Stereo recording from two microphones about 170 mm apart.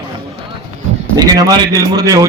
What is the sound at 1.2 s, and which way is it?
A man's voice, 20° right (ahead or behind).